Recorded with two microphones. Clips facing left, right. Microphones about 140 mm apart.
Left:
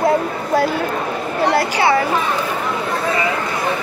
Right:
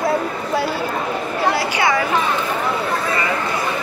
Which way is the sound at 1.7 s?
35° left (ahead or behind).